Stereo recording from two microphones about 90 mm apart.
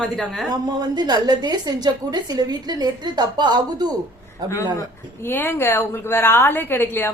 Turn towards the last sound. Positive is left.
turn(degrees=25)  # may be behind; listen again after turning